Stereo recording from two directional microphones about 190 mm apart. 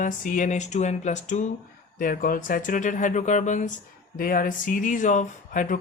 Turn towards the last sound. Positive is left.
turn(degrees=45)  # may be behind; listen again after turning